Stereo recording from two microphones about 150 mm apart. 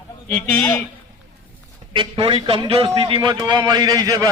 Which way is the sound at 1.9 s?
30° right (ahead or behind).